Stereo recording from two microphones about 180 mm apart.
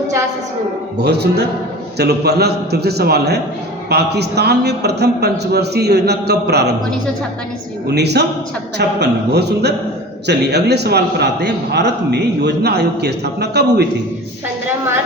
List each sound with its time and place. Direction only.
0.9 s a man's voice: 65° right (ahead or behind)
7.9 s a man's voice: 65° right (ahead or behind)